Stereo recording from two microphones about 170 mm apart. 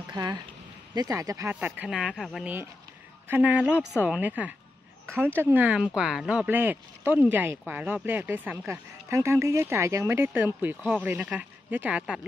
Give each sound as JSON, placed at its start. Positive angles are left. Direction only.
{"t": 0.1, "sound": "speech", "side_deg": -25}
{"t": 1.5, "sound": "speech", "side_deg": -10}
{"t": 2.4, "sound": "speech", "side_deg": -10}